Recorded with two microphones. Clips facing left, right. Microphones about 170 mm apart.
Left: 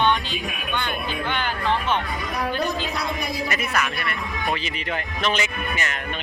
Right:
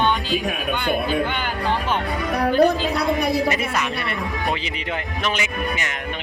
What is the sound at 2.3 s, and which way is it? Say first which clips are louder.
Music: right 9 dB; 60° right (ahead or behind).